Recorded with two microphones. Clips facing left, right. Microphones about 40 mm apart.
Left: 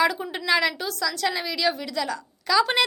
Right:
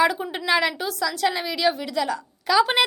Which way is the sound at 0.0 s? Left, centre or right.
Centre.